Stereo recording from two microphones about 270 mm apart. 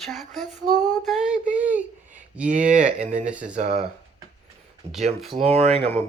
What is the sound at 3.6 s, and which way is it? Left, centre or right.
Speech, right.